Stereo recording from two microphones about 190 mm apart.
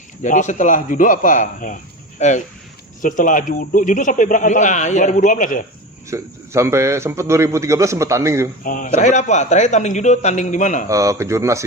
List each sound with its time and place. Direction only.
0.2 s speech: 40° left (ahead or behind)
6.1 s a man's voice: 15° right (ahead or behind)
8.6 s a man's voice: 45° left (ahead or behind)
10.8 s a man's voice: 15° right (ahead or behind)